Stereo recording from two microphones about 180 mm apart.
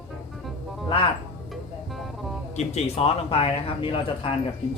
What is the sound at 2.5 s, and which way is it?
A man's voice, 35° left (ahead or behind).